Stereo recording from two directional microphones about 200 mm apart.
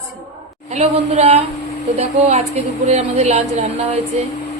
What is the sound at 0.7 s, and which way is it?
A woman's voice, 35° right (ahead or behind).